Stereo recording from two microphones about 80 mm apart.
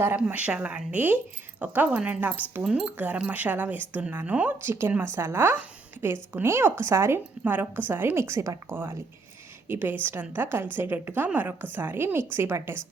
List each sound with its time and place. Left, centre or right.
0.3 s a woman's voice: centre
4.5 s a woman's voice: right